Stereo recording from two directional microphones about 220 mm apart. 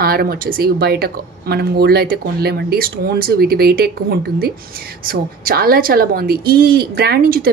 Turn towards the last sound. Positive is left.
turn(degrees=-40)  # may be behind; listen again after turning